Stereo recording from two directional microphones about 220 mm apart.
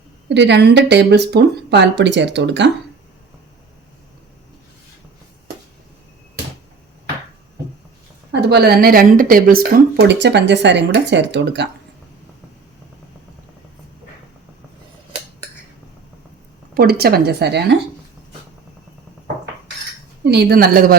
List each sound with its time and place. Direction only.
0.3 s speech: 50° right (ahead or behind)
8.3 s speech: 50° right (ahead or behind)
16.7 s speech: 45° right (ahead or behind)
20.2 s speech: 45° right (ahead or behind)